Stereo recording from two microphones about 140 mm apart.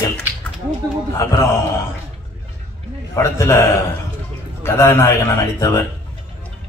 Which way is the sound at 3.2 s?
20° left (ahead or behind).